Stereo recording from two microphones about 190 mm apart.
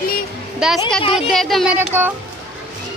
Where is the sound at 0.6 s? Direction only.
5° right (ahead or behind).